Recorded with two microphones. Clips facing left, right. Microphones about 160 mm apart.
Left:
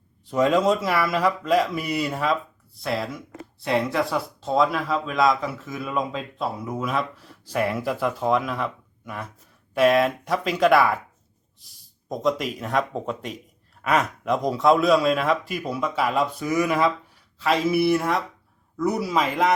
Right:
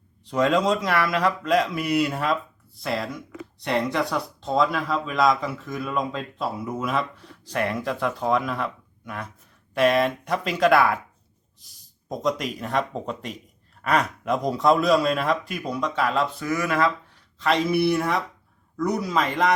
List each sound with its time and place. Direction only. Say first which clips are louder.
0.3 s speech: left 1 dB; centre (ahead or behind)
17.4 s speech: left 1 dB; 5° left (ahead or behind)